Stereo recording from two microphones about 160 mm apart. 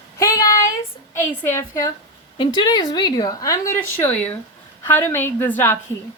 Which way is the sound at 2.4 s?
30° left (ahead or behind).